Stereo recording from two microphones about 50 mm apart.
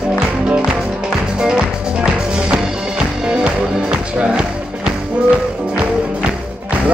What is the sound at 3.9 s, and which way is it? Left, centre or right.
Music, centre.